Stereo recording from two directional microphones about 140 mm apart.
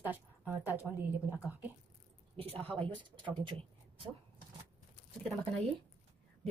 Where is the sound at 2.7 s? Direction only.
40° right (ahead or behind).